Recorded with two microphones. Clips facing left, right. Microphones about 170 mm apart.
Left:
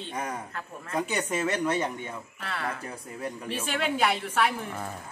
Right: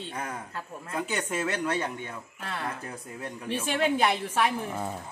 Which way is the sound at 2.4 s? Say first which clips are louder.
Left 1 dB; 15° right (ahead or behind).